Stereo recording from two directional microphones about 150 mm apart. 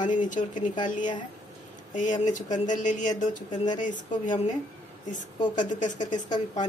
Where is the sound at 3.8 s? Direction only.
55° left (ahead or behind).